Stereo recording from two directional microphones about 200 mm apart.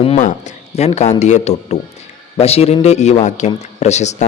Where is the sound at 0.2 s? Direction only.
40° left (ahead or behind).